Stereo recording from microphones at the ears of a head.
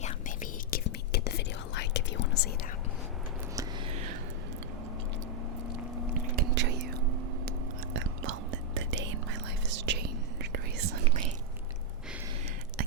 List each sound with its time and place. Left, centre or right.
0.0 s whispering: left
3.5 s whispering: right
6.1 s whispering: right